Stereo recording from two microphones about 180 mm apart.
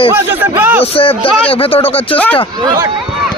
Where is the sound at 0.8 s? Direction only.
30° left (ahead or behind).